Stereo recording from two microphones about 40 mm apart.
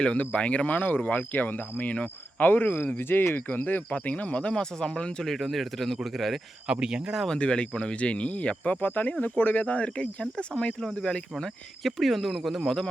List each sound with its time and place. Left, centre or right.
0.2 s speech: left
3.5 s speech: left
3.9 s speech: left
4.5 s speech: left
5.2 s speech: centre
6.7 s speech: centre
7.3 s speech: left
8.8 s speech: left
10.8 s speech: centre
11.8 s speech: centre